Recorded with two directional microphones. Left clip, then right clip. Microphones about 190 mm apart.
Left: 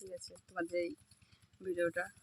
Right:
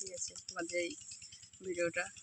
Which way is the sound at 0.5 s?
Centre (ahead or behind).